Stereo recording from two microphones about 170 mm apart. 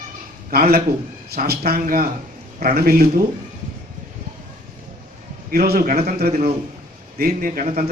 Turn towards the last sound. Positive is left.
turn(degrees=-55)  # may be behind; listen again after turning